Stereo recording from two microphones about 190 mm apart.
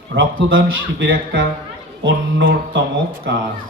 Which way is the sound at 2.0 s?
75° right (ahead or behind).